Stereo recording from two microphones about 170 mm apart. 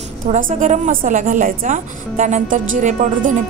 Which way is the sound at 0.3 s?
50° right (ahead or behind).